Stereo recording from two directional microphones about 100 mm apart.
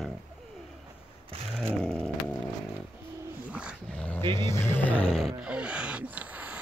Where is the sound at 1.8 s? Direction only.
5° left (ahead or behind).